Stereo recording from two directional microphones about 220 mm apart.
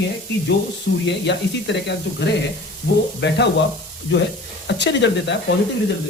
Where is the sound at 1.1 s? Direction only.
55° left (ahead or behind).